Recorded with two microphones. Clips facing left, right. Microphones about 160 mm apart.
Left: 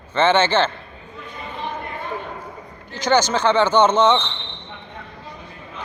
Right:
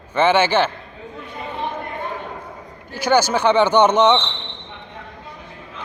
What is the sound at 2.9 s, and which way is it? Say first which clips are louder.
Speech: right 1 dB; 10° right (ahead or behind).